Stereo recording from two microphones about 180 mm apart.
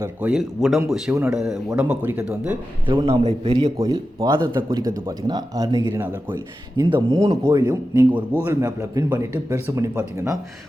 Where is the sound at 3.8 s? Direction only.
20° right (ahead or behind).